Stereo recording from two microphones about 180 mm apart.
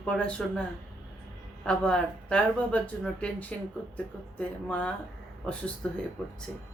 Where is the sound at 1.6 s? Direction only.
5° left (ahead or behind).